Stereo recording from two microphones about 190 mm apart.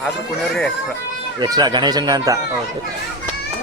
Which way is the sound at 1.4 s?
20° right (ahead or behind).